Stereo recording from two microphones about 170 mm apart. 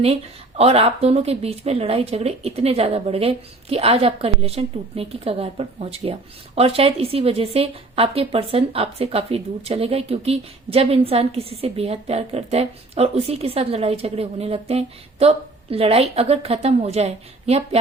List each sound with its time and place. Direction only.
0.0 s speech: 35° right (ahead or behind)